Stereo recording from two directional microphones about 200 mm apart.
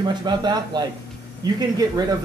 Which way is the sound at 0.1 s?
20° right (ahead or behind).